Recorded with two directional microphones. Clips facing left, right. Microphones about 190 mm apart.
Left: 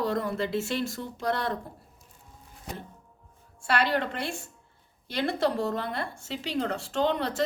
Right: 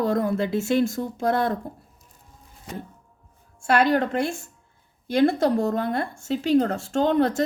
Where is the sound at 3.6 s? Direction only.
45° right (ahead or behind).